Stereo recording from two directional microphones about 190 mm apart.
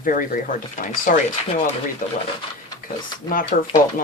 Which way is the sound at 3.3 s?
45° left (ahead or behind).